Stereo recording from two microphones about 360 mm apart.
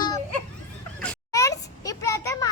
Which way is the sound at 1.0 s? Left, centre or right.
Centre.